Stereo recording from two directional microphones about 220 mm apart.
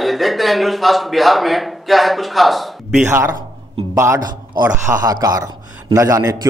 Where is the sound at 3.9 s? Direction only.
15° right (ahead or behind).